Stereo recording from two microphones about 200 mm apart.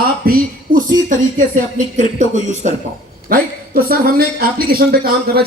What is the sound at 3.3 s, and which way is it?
A man's voice, 50° right (ahead or behind).